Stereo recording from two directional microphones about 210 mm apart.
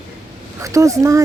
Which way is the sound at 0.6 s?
15° right (ahead or behind).